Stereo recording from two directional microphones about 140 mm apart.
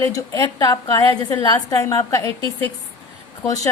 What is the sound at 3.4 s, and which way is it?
Speech, 25° left (ahead or behind).